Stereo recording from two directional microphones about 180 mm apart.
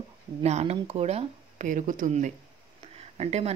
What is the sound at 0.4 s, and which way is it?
A woman's voice, 40° right (ahead or behind).